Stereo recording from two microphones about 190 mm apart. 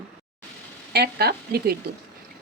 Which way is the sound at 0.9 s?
55° right (ahead or behind).